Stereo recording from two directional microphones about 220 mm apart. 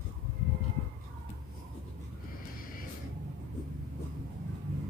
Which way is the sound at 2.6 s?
40° left (ahead or behind).